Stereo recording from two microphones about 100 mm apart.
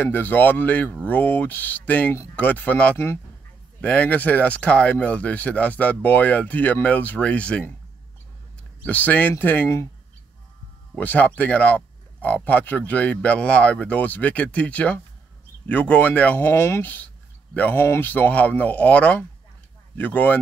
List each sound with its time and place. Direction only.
0.0 s speech: 20° left (ahead or behind)
8.8 s speech: 15° left (ahead or behind)
11.0 s speech: 15° left (ahead or behind)